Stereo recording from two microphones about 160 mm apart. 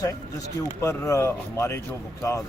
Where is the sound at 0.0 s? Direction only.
20° left (ahead or behind).